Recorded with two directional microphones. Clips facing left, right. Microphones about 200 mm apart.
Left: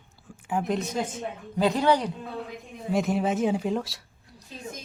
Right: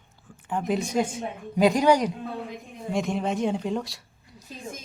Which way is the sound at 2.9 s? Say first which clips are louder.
Left 2 dB; 5° left (ahead or behind).